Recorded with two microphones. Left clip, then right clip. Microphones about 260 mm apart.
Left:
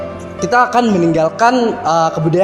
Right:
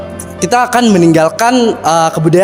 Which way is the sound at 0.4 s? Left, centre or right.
Right.